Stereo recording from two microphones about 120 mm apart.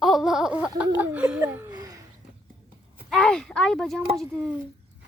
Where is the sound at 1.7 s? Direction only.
30° right (ahead or behind).